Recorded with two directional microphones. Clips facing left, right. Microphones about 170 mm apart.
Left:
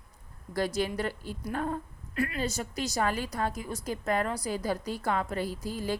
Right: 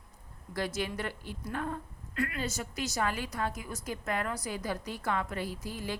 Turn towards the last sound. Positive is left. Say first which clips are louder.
# left 5 dB
turn(degrees=40)  # may be behind; listen again after turning